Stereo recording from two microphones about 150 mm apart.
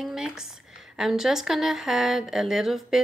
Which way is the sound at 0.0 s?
5° right (ahead or behind).